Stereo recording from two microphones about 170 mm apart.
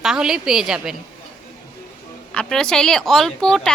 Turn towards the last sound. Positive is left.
turn(degrees=5)  # may be behind; listen again after turning